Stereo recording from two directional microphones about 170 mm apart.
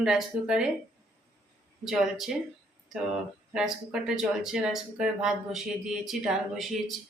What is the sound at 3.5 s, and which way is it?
Speech, 5° right (ahead or behind).